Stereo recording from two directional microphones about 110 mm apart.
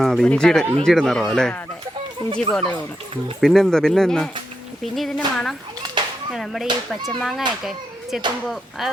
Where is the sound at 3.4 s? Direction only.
5° left (ahead or behind).